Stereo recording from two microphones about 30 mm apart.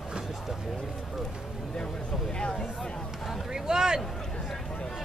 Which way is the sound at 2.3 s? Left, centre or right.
Left.